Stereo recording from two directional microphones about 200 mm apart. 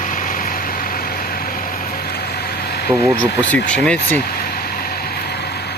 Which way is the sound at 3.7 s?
5° left (ahead or behind).